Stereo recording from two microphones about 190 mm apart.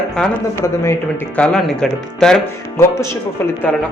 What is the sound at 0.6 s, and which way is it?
A man's voice, 15° left (ahead or behind).